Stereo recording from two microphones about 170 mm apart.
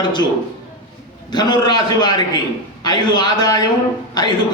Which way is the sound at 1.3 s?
25° left (ahead or behind).